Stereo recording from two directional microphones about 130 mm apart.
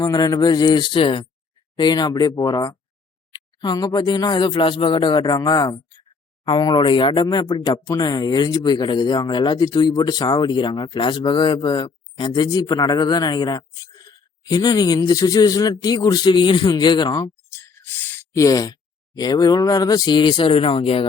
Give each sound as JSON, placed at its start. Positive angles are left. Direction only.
{"t": 0.0, "sound": "speech", "side_deg": 30}
{"t": 17.5, "sound": "speech", "side_deg": 20}